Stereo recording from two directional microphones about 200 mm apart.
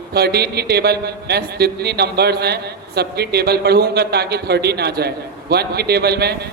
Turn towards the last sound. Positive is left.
turn(degrees=-55)  # may be behind; listen again after turning